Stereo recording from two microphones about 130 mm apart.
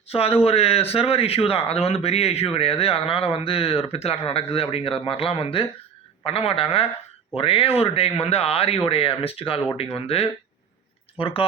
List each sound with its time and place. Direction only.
0.1 s speech: 50° left (ahead or behind)